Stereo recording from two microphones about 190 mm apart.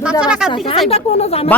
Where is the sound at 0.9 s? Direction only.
35° left (ahead or behind).